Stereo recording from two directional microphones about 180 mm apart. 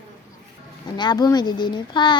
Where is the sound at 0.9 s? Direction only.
25° left (ahead or behind).